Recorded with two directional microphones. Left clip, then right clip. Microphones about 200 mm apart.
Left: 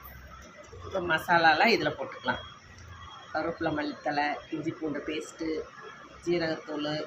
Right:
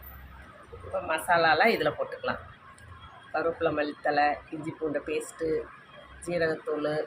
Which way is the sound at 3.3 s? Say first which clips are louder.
Right 3 dB; 20° right (ahead or behind).